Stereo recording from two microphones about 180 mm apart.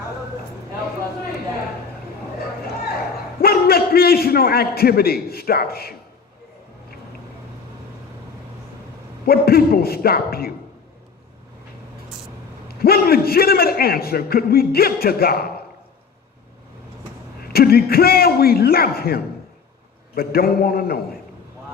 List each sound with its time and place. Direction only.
3.4 s a man's voice: 60° left (ahead or behind)
9.2 s a man's voice: 55° left (ahead or behind)
12.6 s a man's voice: 60° left (ahead or behind)
17.5 s a man's voice: 60° left (ahead or behind)